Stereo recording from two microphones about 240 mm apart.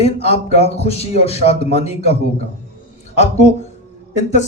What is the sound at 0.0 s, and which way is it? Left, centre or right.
A man's voice, left.